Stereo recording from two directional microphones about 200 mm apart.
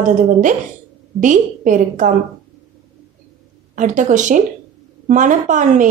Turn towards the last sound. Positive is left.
turn(degrees=-40)  # may be behind; listen again after turning